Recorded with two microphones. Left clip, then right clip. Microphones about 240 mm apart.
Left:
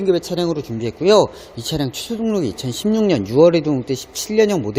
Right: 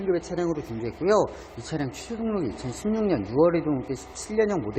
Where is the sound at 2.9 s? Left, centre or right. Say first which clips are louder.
Left 8 dB; left.